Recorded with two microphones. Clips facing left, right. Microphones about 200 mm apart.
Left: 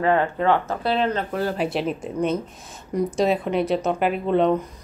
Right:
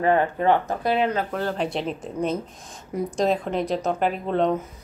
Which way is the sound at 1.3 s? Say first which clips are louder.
Left 2 dB; 10° left (ahead or behind).